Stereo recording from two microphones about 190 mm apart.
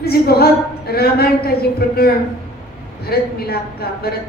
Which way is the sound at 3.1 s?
55° left (ahead or behind).